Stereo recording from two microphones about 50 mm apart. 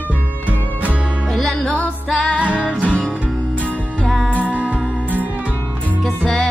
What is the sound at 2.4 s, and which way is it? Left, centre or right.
Music, right.